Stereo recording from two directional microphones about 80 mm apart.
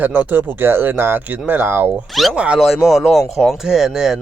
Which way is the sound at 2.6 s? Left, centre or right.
Centre.